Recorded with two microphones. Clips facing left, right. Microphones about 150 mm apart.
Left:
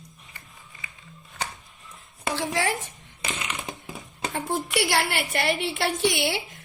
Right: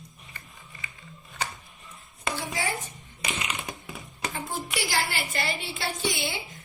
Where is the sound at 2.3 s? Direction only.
90° left.